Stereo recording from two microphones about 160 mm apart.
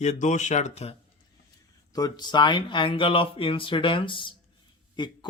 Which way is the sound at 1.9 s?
25° left (ahead or behind).